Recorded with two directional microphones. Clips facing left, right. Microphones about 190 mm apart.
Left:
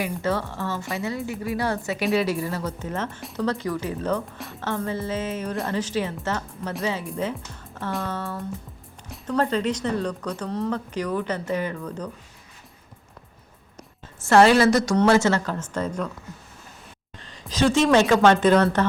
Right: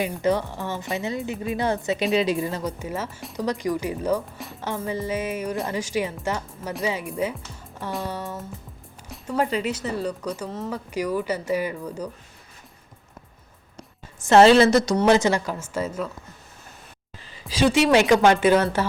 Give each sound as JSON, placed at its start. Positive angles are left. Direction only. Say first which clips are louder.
{"t": 0.0, "sound": "a woman's voice", "louder": "right 3 dB", "side_deg": -15}
{"t": 4.4, "sound": "music", "louder": "even", "side_deg": 0}
{"t": 4.9, "sound": "speech", "louder": "right 1 dB", "side_deg": -15}
{"t": 6.6, "sound": "speech", "louder": "left 1 dB", "side_deg": 0}
{"t": 6.8, "sound": "speech", "louder": "right 1 dB", "side_deg": -15}
{"t": 14.2, "sound": "a woman's voice", "louder": "right 2 dB", "side_deg": -20}
{"t": 17.2, "sound": "a woman's voice", "louder": "right 1 dB", "side_deg": -5}